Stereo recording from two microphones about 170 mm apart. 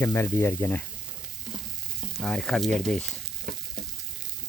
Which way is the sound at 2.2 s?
5° left (ahead or behind).